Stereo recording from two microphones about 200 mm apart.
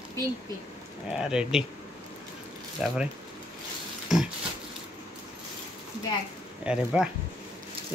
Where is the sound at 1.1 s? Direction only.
5° right (ahead or behind).